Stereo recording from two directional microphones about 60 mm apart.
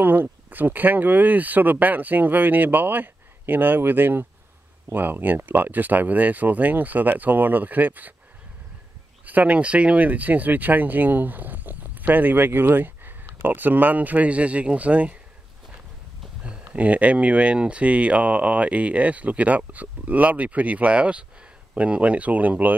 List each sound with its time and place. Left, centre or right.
0.0 s speech: right
9.2 s speech: right
16.4 s speech: right